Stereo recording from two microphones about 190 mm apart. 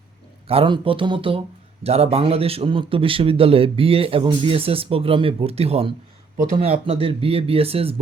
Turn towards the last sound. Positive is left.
turn(degrees=-30)  # may be behind; listen again after turning